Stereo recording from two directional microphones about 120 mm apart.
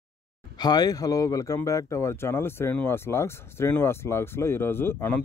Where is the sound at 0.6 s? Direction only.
35° left (ahead or behind).